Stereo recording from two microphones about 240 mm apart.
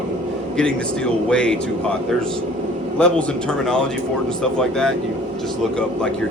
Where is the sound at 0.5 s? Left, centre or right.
Centre.